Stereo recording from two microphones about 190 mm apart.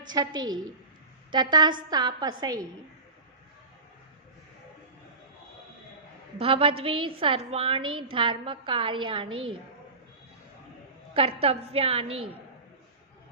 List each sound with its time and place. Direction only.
0.1 s a woman's voice: 20° right (ahead or behind)
6.4 s a woman's voice: 30° right (ahead or behind)
11.1 s a woman's voice: 30° right (ahead or behind)